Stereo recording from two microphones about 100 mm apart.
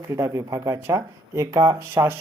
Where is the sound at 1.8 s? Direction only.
25° right (ahead or behind).